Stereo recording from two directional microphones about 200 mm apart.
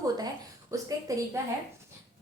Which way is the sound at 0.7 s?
15° right (ahead or behind).